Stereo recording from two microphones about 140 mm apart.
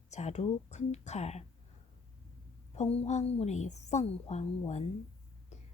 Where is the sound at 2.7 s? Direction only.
50° left (ahead or behind).